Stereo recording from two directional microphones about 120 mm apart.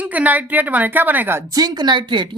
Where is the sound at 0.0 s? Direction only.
10° right (ahead or behind).